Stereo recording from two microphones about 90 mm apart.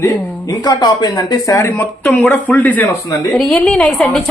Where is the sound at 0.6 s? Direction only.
50° left (ahead or behind).